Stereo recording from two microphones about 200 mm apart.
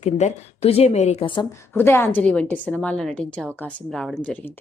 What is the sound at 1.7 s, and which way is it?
A woman's voice, 10° left (ahead or behind).